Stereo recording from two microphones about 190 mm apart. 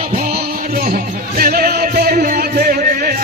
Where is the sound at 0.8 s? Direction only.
50° right (ahead or behind).